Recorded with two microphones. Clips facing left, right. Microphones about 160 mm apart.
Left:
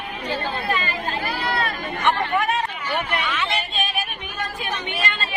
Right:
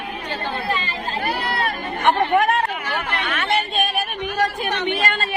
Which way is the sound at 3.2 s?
55° right (ahead or behind).